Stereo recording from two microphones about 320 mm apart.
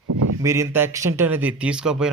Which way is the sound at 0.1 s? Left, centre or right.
Right.